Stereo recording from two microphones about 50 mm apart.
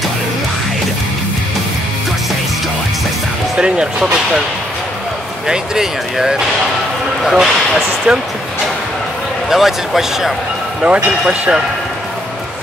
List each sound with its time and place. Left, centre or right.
3.5 s speech: centre
5.5 s speech: centre
9.5 s speech: centre
10.8 s speech: right